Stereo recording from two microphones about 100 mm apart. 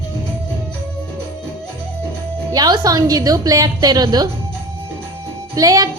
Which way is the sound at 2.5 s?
45° right (ahead or behind).